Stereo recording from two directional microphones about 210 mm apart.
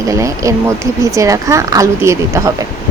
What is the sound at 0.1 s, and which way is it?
Speech, 15° right (ahead or behind).